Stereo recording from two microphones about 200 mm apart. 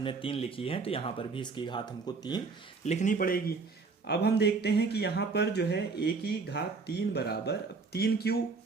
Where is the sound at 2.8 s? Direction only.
35° left (ahead or behind).